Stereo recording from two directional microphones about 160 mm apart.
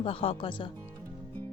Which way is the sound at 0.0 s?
35° left (ahead or behind).